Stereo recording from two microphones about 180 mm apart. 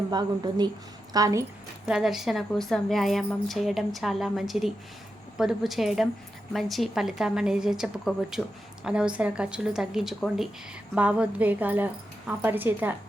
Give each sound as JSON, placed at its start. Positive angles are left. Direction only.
{"t": 0.1, "sound": "speech", "side_deg": -25}
{"t": 1.9, "sound": "a woman's voice", "side_deg": 0}